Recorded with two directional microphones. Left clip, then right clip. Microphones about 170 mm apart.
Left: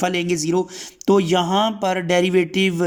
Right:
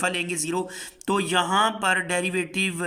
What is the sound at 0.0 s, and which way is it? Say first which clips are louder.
Speech: left 5 dB; 30° left (ahead or behind).